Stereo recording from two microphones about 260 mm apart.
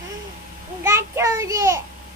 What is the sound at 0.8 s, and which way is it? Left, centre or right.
A child's voice, centre.